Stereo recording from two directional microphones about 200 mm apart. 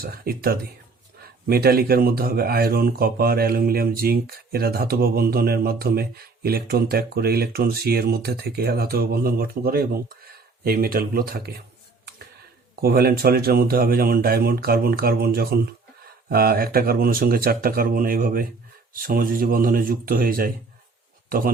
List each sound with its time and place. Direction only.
0.0 s speech: 50° right (ahead or behind)
12.8 s speech: 50° right (ahead or behind)